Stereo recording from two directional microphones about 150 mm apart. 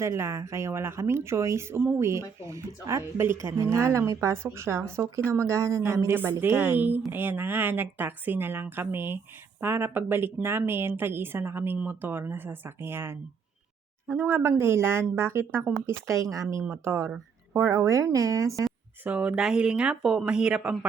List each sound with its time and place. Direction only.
0.0 s speech: 20° right (ahead or behind)
19.0 s speech: 10° right (ahead or behind)